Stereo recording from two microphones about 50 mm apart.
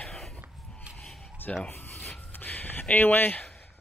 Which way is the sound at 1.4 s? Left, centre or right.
Left.